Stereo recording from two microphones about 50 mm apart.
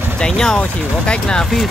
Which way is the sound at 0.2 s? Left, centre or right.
Centre.